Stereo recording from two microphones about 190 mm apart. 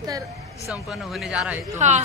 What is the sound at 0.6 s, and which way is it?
Speech, centre (ahead or behind).